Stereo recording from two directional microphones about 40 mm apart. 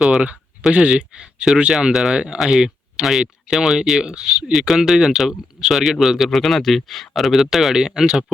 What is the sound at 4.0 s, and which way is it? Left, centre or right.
Speech, right.